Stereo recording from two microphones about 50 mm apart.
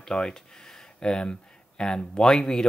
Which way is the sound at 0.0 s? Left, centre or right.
Centre.